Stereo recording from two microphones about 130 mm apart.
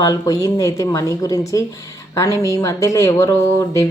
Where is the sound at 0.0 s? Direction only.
25° left (ahead or behind).